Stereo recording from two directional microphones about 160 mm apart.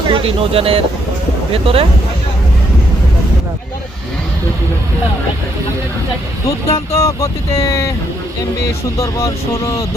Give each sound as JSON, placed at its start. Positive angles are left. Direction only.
{"t": 0.1, "sound": "speech", "side_deg": -35}
{"t": 6.5, "sound": "speech", "side_deg": 20}
{"t": 9.0, "sound": "speech", "side_deg": 20}